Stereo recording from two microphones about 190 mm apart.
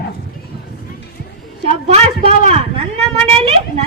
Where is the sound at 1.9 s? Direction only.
35° right (ahead or behind).